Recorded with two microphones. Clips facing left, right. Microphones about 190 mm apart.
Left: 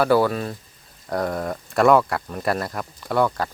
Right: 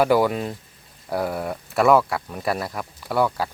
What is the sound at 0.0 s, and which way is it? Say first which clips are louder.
Speech: even; 15° right (ahead or behind).